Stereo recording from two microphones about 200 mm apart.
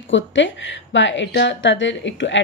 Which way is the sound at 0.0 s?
70° left (ahead or behind).